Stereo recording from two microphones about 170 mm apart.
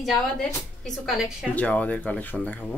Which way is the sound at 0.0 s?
Centre (ahead or behind).